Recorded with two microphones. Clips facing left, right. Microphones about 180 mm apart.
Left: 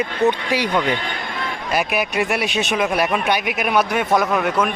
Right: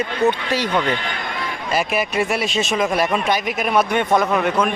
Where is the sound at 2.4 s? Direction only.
65° left (ahead or behind).